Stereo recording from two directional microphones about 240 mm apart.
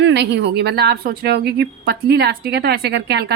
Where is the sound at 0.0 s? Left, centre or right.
Right.